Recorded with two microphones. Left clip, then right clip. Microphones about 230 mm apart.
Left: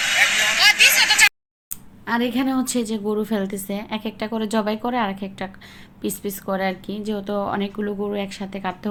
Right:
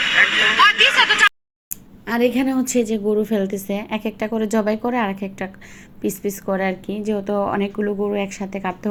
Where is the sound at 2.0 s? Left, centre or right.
Centre.